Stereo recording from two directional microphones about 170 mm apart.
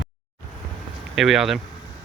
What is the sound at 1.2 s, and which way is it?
Speech, centre (ahead or behind).